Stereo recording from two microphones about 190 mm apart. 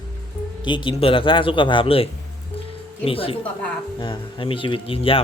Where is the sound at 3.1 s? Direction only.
30° left (ahead or behind).